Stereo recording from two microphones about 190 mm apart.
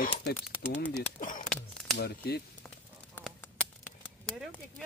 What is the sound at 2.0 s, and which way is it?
Speech, 55° left (ahead or behind).